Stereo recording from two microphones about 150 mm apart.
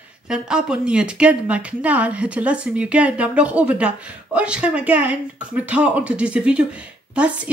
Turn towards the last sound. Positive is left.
turn(degrees=-10)  # may be behind; listen again after turning